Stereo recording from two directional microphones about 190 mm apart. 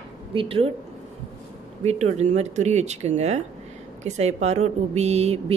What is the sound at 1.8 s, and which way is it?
A woman's voice, 35° right (ahead or behind).